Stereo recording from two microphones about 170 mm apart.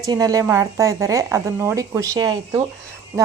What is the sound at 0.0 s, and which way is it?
A woman's voice, 20° right (ahead or behind).